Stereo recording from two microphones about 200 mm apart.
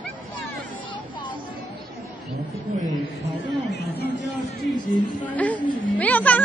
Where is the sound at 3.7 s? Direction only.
55° left (ahead or behind).